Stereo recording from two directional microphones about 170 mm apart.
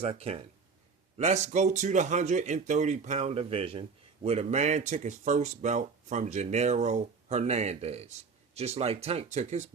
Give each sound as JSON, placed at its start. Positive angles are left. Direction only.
{"t": 0.0, "sound": "speech", "side_deg": -35}